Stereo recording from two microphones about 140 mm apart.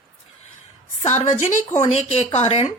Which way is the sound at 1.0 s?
55° left (ahead or behind).